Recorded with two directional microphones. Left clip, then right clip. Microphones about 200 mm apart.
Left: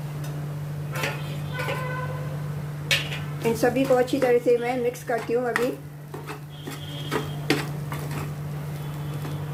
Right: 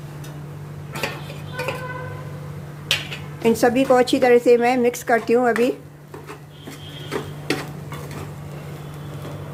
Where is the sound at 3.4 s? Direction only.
35° right (ahead or behind).